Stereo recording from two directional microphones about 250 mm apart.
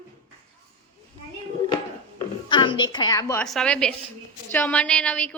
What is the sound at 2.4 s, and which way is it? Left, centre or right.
A woman's voice, centre.